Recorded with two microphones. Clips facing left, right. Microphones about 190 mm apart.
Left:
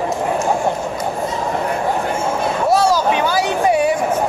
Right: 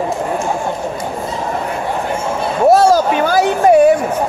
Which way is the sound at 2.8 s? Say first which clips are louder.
Right 4 dB; 50° right (ahead or behind).